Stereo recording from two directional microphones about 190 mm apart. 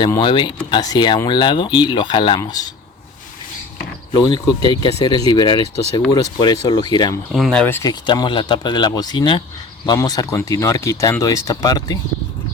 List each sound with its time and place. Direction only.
0.2 s speech: 25° left (ahead or behind)
4.1 s speech: 20° left (ahead or behind)
7.3 s speech: centre (ahead or behind); by 11.9 s 20° left (ahead or behind)